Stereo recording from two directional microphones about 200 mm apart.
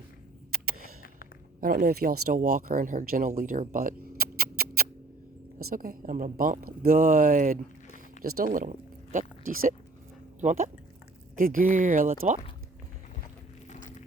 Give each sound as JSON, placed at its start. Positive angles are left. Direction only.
{"t": 0.5, "sound": "a sound", "side_deg": -45}
{"t": 1.6, "sound": "a woman's voice", "side_deg": -45}
{"t": 9.1, "sound": "a woman's voice", "side_deg": -45}
{"t": 13.7, "sound": "vehicle", "side_deg": 40}